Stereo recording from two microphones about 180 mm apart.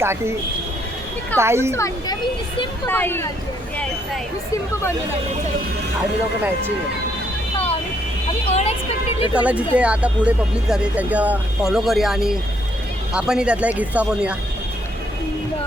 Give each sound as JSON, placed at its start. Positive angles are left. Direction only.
{"t": 0.0, "sound": "speech", "side_deg": -15}
{"t": 1.4, "sound": "speech", "side_deg": -15}
{"t": 1.7, "sound": "speech", "side_deg": 15}
{"t": 8.4, "sound": "a sound", "side_deg": 35}
{"t": 9.2, "sound": "speech", "side_deg": -10}